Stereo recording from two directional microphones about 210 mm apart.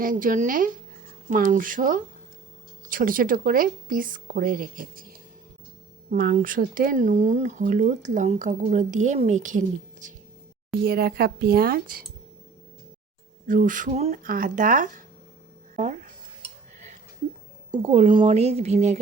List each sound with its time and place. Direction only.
0.0 s speech: 40° right (ahead or behind)
10.8 s speech: 45° right (ahead or behind)
13.5 s speech: 40° right (ahead or behind)
17.8 s speech: 30° right (ahead or behind)